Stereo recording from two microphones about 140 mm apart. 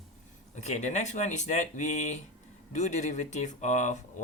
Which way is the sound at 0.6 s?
55° left (ahead or behind).